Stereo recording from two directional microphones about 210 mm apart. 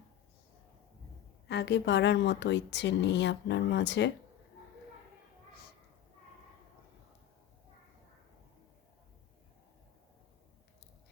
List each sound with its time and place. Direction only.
1.5 s a woman's voice: 55° left (ahead or behind)